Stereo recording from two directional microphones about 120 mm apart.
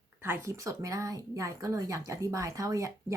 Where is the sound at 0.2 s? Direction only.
20° right (ahead or behind).